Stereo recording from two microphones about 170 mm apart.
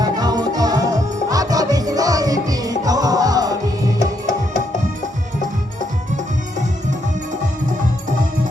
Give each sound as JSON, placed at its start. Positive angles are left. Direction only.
{"t": 0.0, "sound": "music", "side_deg": -25}